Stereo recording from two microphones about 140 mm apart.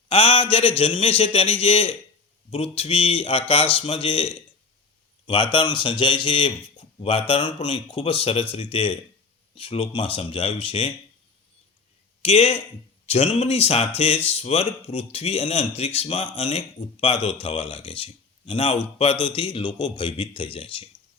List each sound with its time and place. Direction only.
0.1 s speech: 40° left (ahead or behind)
12.2 s speech: 45° left (ahead or behind)